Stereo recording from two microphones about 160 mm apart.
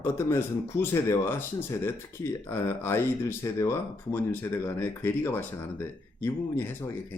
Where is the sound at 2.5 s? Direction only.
15° left (ahead or behind).